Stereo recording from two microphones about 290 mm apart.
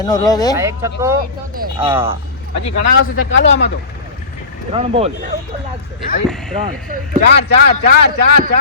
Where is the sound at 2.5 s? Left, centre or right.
Left.